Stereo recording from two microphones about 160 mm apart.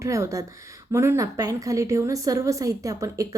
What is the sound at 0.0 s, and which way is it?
A woman's voice, 20° right (ahead or behind).